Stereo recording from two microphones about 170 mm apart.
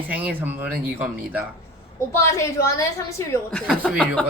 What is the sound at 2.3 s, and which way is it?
A woman's voice, 15° left (ahead or behind).